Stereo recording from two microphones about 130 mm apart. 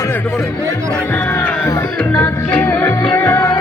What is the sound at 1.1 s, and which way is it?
Music, 15° left (ahead or behind).